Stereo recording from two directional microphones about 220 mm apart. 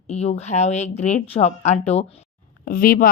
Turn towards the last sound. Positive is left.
turn(degrees=40)  # may be behind; listen again after turning